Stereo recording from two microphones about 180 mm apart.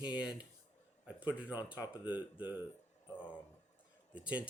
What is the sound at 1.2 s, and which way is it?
Speech, 10° right (ahead or behind).